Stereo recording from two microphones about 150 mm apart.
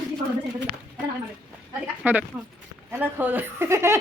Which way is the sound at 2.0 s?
15° right (ahead or behind).